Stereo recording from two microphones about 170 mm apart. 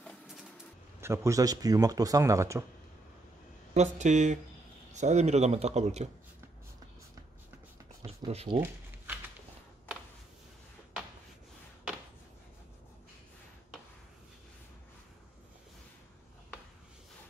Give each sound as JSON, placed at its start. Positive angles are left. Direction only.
{"t": 0.0, "sound": "printer", "side_deg": 5}
{"t": 1.0, "sound": "speech", "side_deg": -15}
{"t": 3.7, "sound": "speech", "side_deg": -45}
{"t": 8.0, "sound": "speech", "side_deg": -35}
{"t": 8.5, "sound": "a sound", "side_deg": -10}